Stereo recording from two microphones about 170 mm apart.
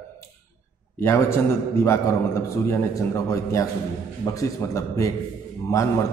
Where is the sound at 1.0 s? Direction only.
15° left (ahead or behind).